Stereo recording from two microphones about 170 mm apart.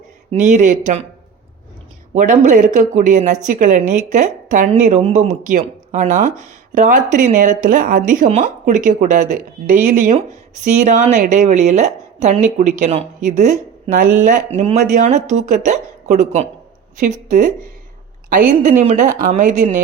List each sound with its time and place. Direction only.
0.3 s a woman's voice: 45° right (ahead or behind)
2.1 s a woman's voice: 50° right (ahead or behind)